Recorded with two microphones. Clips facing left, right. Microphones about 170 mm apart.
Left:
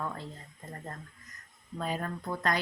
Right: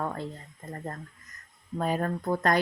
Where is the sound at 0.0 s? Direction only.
55° right (ahead or behind).